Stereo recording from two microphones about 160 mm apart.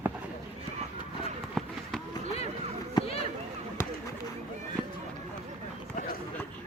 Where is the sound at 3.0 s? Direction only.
35° left (ahead or behind).